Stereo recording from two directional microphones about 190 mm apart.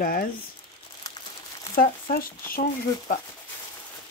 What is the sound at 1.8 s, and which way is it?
Speech, 50° left (ahead or behind).